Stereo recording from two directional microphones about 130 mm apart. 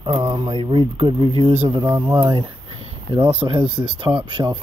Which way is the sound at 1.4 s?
55° right (ahead or behind).